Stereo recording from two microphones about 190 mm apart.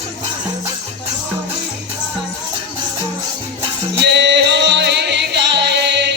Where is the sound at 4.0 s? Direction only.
65° right (ahead or behind).